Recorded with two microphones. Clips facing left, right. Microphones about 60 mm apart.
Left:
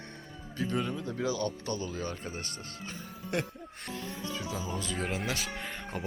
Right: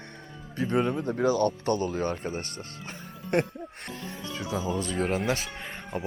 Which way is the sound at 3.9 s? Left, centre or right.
Right.